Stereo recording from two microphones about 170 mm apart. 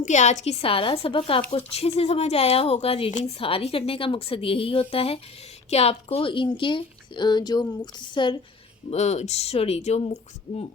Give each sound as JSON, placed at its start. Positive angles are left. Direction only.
{"t": 0.0, "sound": "a woman's voice", "side_deg": 45}
{"t": 8.9, "sound": "a woman's voice", "side_deg": 40}